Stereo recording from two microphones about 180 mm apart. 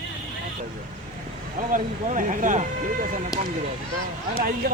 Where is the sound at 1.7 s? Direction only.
45° right (ahead or behind).